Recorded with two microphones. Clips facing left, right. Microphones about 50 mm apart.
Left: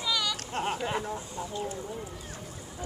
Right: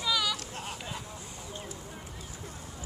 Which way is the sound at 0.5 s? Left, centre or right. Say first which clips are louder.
Left 9 dB; left.